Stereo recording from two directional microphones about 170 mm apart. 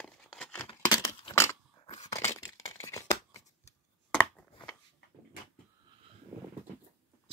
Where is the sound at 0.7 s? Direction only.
25° left (ahead or behind).